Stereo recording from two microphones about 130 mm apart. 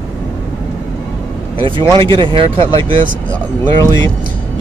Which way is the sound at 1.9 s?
40° right (ahead or behind).